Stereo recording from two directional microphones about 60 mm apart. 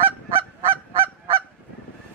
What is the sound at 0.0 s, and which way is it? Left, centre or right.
Honk, right.